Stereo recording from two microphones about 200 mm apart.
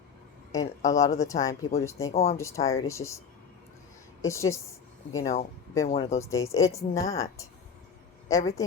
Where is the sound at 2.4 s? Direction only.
15° left (ahead or behind).